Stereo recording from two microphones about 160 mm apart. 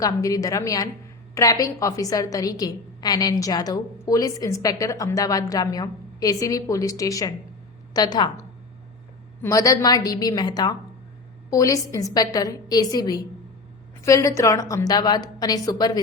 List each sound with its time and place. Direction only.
0.0 s a woman's voice: 20° left (ahead or behind)